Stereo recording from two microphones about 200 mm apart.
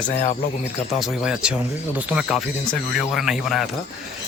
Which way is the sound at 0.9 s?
Centre (ahead or behind).